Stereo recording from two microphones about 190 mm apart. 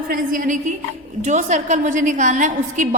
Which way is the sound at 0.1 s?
45° right (ahead or behind).